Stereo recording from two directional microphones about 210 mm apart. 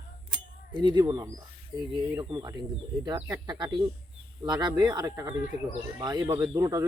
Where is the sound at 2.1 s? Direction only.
15° right (ahead or behind).